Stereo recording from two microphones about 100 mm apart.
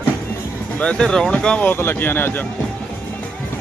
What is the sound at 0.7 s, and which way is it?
Speech, 10° left (ahead or behind).